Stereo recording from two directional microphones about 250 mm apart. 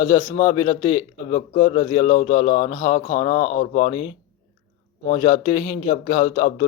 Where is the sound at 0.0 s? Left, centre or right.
Centre.